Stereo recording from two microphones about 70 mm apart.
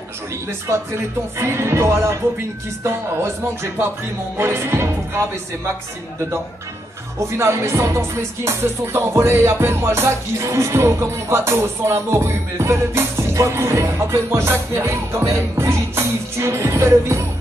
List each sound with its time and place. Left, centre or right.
1.4 s music: right
7.2 s music: right